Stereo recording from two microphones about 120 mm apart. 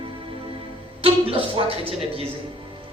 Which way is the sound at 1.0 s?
55° right (ahead or behind).